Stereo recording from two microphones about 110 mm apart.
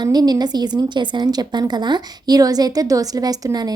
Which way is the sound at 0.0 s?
40° right (ahead or behind).